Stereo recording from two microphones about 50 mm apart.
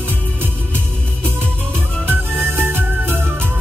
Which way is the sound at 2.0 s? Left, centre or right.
Right.